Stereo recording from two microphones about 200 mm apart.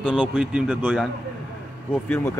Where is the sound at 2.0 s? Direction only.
10° left (ahead or behind).